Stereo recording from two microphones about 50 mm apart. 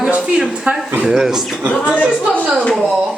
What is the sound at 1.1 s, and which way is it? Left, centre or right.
Speech, centre.